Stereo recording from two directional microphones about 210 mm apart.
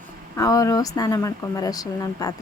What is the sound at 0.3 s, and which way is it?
Speech, 15° left (ahead or behind).